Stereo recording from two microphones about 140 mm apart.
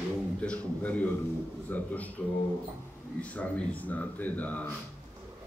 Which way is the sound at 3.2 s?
10° left (ahead or behind).